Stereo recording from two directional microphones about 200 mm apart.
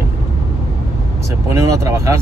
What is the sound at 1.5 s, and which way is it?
Speech, 15° right (ahead or behind).